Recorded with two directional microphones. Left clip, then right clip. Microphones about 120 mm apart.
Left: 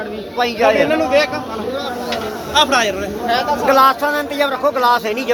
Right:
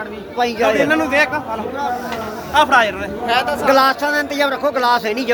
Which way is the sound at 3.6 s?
55° right (ahead or behind).